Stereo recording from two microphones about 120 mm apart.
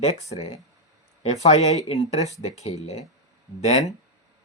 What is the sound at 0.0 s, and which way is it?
Speech, 65° left (ahead or behind).